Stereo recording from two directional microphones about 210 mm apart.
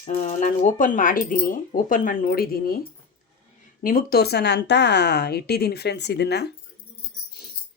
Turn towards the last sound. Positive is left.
turn(degrees=50)  # may be behind; listen again after turning